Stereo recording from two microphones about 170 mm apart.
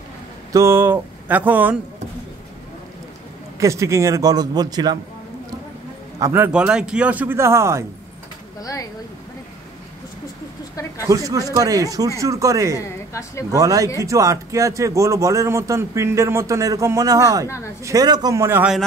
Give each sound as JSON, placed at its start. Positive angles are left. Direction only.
{"t": 0.5, "sound": "speech", "side_deg": -15}
{"t": 3.5, "sound": "a man's voice", "side_deg": -15}
{"t": 6.1, "sound": "speech", "side_deg": -15}
{"t": 11.1, "sound": "a man's voice", "side_deg": -20}
{"t": 12.7, "sound": "a woman's voice", "side_deg": 15}
{"t": 13.5, "sound": "a man's voice", "side_deg": -20}